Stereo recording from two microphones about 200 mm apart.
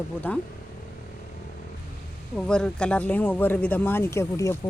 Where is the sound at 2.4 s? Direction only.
5° left (ahead or behind).